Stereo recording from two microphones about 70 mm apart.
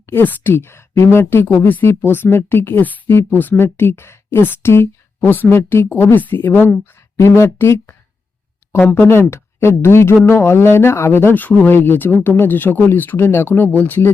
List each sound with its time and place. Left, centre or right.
0.0 s speech: left
7.2 s speech: left
9.0 s speech: left